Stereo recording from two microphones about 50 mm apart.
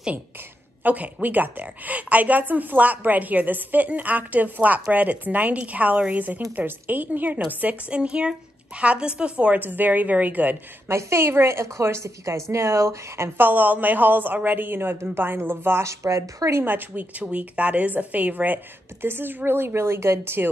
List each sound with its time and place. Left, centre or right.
0.8 s a woman's voice: right
7.9 s a woman's voice: right
9.6 s a woman's voice: right
10.9 s a woman's voice: right
13.4 s a woman's voice: right
15.8 s a woman's voice: right
16.6 s a woman's voice: right